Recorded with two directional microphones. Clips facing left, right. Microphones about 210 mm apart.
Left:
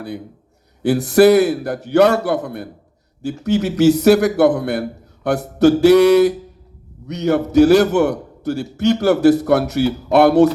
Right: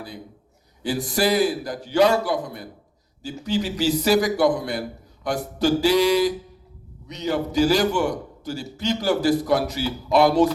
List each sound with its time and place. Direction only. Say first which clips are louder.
0.8 s a man's voice: left 11 dB; 65° left (ahead or behind)